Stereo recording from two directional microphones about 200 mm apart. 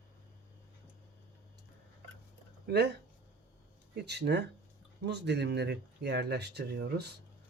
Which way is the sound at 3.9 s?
55° right (ahead or behind).